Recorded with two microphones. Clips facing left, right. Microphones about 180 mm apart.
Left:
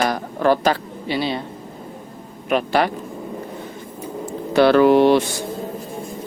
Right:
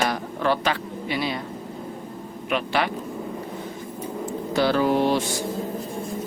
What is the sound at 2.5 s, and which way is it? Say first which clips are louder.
Speech: left 6 dB; 45° left (ahead or behind).